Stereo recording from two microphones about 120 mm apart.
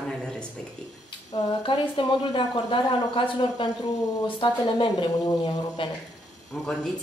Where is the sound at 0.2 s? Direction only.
5° left (ahead or behind).